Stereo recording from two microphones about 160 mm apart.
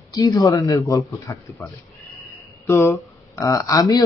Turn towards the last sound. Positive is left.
turn(degrees=20)  # may be behind; listen again after turning